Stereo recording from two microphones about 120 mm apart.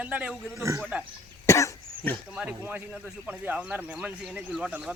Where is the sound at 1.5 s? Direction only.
25° left (ahead or behind).